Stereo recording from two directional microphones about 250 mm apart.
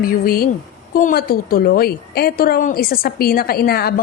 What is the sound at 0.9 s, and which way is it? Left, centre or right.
A woman's voice, left.